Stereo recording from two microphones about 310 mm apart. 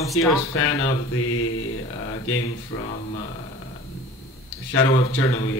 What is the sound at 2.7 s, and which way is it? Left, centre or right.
Speech, left.